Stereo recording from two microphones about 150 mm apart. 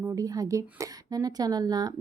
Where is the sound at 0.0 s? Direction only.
20° right (ahead or behind).